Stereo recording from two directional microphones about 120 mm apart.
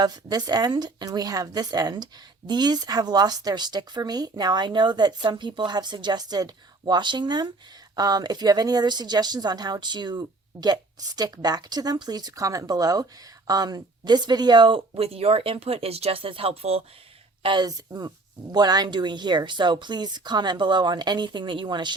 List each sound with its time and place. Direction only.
0.0 s speech: 35° right (ahead or behind)
14.9 s speech: 55° right (ahead or behind)
17.4 s speech: 40° right (ahead or behind)
17.7 s speech: 30° right (ahead or behind)